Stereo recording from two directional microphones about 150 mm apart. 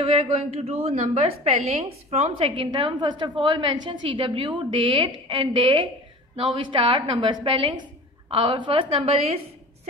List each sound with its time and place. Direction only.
0.0 s a woman's voice: 40° right (ahead or behind)